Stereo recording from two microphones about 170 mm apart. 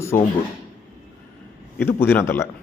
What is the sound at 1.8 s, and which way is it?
Speech, 10° left (ahead or behind).